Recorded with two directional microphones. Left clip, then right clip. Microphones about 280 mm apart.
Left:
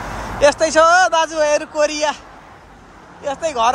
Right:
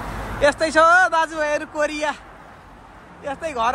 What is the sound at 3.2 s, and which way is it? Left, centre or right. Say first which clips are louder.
Speech: left 5 dB; centre.